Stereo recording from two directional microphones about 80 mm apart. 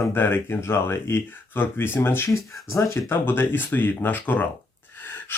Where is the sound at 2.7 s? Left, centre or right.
Left.